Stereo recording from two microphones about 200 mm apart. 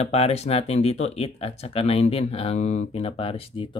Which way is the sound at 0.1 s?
30° left (ahead or behind).